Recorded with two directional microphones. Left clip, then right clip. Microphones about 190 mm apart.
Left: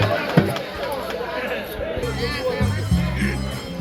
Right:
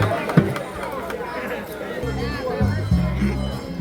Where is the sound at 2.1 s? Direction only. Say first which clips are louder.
Left 2 dB; 35° right (ahead or behind).